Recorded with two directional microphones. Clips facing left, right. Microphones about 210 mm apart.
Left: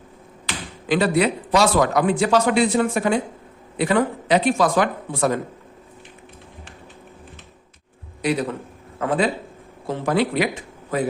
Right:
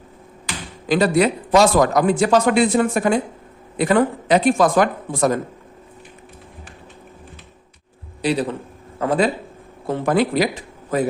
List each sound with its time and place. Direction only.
0.9 s a man's voice: 40° right (ahead or behind)
8.2 s a man's voice: 30° right (ahead or behind)
9.8 s speech: 55° right (ahead or behind)
10.3 s speech: 35° right (ahead or behind)